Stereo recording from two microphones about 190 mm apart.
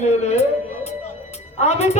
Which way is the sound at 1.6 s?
35° left (ahead or behind).